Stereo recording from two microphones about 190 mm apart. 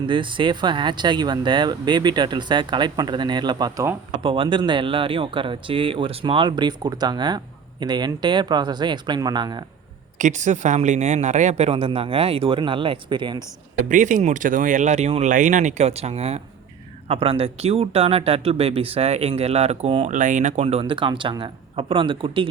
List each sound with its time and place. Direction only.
0.1 s speech: 25° right (ahead or behind)
10.2 s speech: 40° right (ahead or behind); by 13.4 s 25° right (ahead or behind)
13.9 s speech: 40° right (ahead or behind); by 22.4 s 25° right (ahead or behind)